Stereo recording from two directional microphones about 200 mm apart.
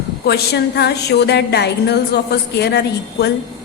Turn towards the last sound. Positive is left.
turn(degrees=55)  # may be behind; listen again after turning